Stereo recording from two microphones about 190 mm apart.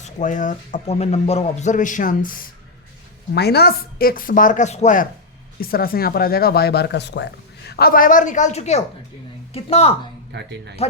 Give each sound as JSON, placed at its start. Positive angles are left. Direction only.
{"t": 0.0, "sound": "speech", "side_deg": 40}
{"t": 3.3, "sound": "speech", "side_deg": 60}
{"t": 5.5, "sound": "speech", "side_deg": 50}
{"t": 10.3, "sound": "speech", "side_deg": -65}